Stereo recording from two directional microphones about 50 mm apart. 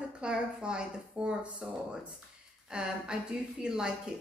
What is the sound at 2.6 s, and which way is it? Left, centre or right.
A woman's voice, centre.